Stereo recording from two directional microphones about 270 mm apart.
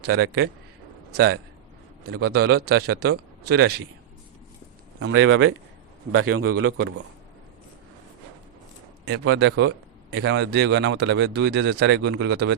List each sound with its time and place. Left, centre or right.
0.1 s speech: right
2.0 s speech: right
4.9 s a man's voice: right
9.0 s speech: right